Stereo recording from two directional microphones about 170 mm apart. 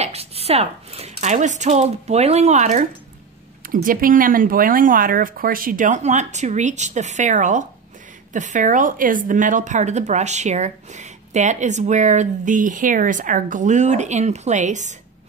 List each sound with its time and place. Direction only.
0.0 s speech: 35° right (ahead or behind)
3.6 s a woman's voice: 55° right (ahead or behind)